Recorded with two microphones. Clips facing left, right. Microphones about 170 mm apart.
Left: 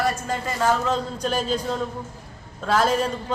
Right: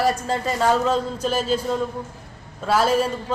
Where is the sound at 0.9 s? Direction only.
5° right (ahead or behind).